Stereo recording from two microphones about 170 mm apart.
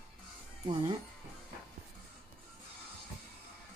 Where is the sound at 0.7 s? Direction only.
30° right (ahead or behind).